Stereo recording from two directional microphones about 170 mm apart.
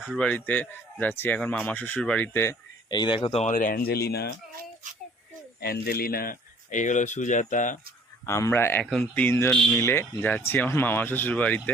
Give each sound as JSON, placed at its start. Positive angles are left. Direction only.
{"t": 0.0, "sound": "speech", "side_deg": 0}
{"t": 2.9, "sound": "speech", "side_deg": 25}
{"t": 5.5, "sound": "speech", "side_deg": 65}
{"t": 8.3, "sound": "speech", "side_deg": 15}